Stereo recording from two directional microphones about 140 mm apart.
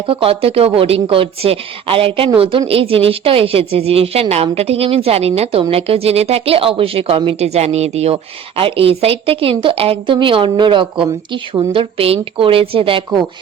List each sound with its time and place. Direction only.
0.0 s a woman's voice: 40° right (ahead or behind)